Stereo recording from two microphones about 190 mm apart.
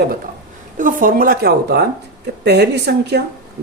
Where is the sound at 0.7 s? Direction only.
45° right (ahead or behind); by 3.2 s 60° right (ahead or behind).